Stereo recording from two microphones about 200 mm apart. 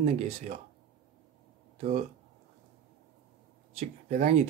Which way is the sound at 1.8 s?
35° right (ahead or behind).